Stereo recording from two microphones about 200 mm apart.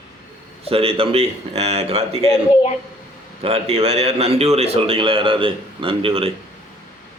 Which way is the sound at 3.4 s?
30° right (ahead or behind).